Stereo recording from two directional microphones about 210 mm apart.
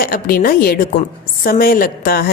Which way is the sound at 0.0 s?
45° left (ahead or behind).